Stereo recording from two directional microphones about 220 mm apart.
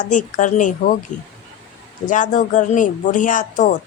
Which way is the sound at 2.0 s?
35° left (ahead or behind).